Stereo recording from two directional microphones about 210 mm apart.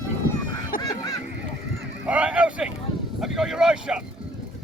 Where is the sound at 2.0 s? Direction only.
5° right (ahead or behind).